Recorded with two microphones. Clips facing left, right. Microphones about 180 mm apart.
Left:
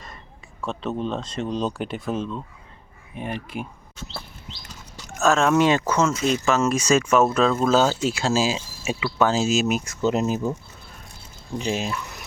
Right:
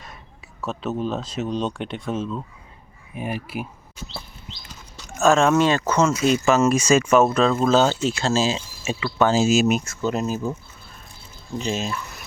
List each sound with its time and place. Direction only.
0.6 s speech: 5° right (ahead or behind)
5.2 s speech: centre (ahead or behind)
5.5 s speech: 15° left (ahead or behind)
9.8 s speech: 20° left (ahead or behind)